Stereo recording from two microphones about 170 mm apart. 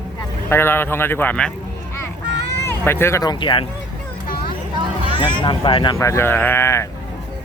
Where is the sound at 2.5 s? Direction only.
15° left (ahead or behind).